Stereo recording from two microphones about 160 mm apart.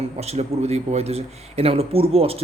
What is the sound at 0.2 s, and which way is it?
Speech, 40° right (ahead or behind).